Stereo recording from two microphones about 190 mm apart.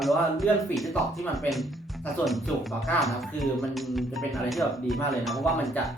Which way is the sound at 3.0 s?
Centre (ahead or behind).